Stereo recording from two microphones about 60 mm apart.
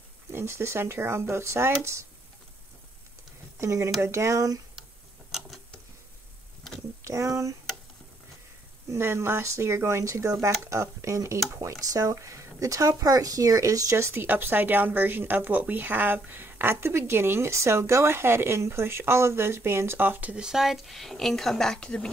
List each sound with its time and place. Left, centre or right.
0.3 s speech: right
3.5 s speech: right
7.0 s speech: right
8.9 s speech: right
14.2 s a woman's voice: right
20.3 s a woman's voice: centre